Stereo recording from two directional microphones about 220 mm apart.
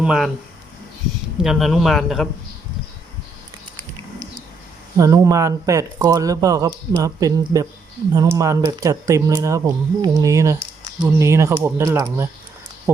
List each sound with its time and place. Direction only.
0.0 s speech: 5° right (ahead or behind)
1.4 s speech: centre (ahead or behind)
4.9 s speech: 15° right (ahead or behind)